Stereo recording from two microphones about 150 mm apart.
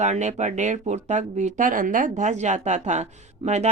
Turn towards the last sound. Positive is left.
turn(degrees=-50)  # may be behind; listen again after turning